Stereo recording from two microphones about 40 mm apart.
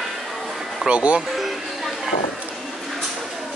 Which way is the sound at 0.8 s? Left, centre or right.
Right.